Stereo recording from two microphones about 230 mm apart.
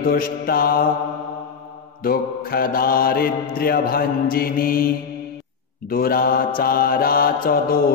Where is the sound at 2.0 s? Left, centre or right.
Left.